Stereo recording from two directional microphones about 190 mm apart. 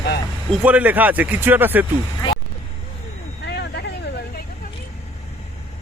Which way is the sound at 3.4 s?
60° left (ahead or behind).